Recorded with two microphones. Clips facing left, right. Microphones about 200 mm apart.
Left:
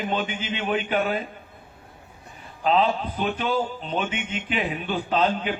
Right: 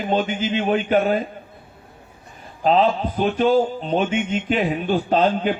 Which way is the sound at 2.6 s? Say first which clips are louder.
Right 4 dB; 40° right (ahead or behind).